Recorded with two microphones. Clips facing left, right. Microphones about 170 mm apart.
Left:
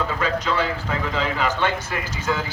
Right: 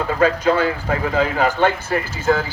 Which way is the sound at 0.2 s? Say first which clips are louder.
Right 10 dB; 45° right (ahead or behind).